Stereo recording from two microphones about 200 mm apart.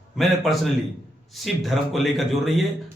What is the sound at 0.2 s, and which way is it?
A man's voice, centre (ahead or behind).